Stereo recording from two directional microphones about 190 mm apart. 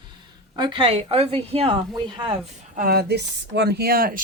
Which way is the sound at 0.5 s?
25° right (ahead or behind).